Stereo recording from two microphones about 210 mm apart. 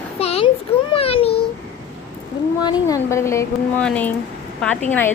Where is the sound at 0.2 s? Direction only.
30° left (ahead or behind).